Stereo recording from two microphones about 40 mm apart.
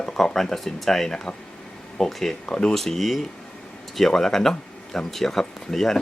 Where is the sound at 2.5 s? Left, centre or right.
Left.